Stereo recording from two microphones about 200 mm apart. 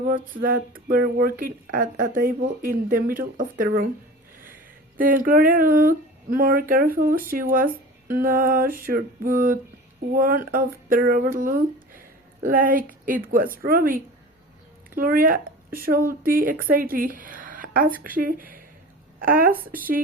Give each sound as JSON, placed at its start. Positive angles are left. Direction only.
{"t": 0.4, "sound": "speech", "side_deg": -45}
{"t": 4.9, "sound": "a woman's voice", "side_deg": -45}